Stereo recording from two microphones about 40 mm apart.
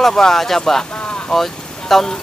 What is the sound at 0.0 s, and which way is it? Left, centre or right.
Speech, centre.